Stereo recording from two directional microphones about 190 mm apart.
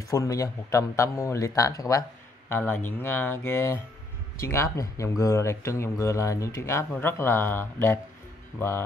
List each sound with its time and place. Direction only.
0.1 s speech: 20° left (ahead or behind)